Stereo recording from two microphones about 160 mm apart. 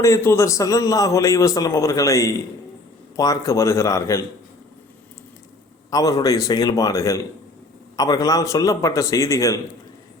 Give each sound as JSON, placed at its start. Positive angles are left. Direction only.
{"t": 0.0, "sound": "a man's voice", "side_deg": 15}
{"t": 5.9, "sound": "a man's voice", "side_deg": 20}